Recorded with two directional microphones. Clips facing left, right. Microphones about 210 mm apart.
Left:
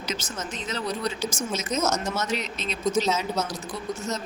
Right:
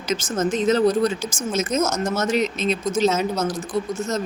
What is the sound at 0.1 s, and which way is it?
Speech, 45° right (ahead or behind).